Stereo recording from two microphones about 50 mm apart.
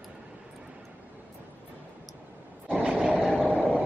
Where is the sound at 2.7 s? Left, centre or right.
Right.